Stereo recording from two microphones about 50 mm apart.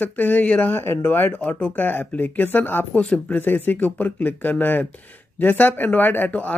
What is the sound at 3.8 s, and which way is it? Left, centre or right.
Speech, left.